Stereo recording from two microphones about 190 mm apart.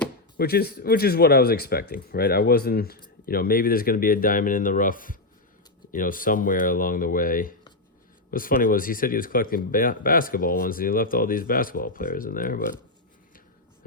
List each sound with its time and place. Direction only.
0.3 s speech: 55° left (ahead or behind)